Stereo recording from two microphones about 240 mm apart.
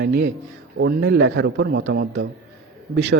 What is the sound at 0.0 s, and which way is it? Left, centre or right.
A man's voice, right.